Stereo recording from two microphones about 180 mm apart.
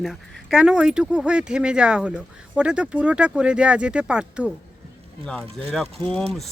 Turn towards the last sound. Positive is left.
turn(degrees=5)  # may be behind; listen again after turning